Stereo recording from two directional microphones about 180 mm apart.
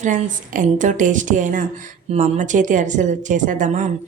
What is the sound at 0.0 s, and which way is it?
A woman's voice, 45° right (ahead or behind).